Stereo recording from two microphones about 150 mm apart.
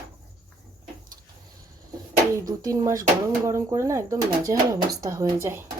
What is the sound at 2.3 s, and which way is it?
Speech, 20° right (ahead or behind).